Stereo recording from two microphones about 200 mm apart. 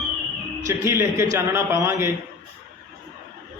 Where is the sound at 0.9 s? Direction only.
15° right (ahead or behind).